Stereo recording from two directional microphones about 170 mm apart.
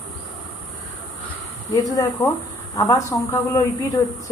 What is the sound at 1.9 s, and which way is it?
Speech, 20° left (ahead or behind).